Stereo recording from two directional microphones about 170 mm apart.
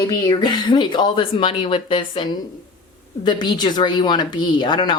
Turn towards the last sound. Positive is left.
turn(degrees=25)  # may be behind; listen again after turning